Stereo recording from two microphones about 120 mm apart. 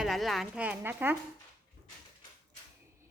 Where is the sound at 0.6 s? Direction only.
15° right (ahead or behind).